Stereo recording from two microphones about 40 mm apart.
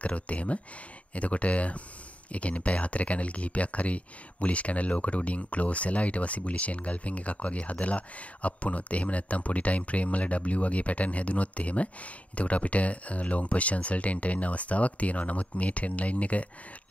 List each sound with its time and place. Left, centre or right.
0.0 s speech: left